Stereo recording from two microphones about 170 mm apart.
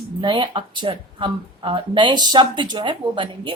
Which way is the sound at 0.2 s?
30° right (ahead or behind).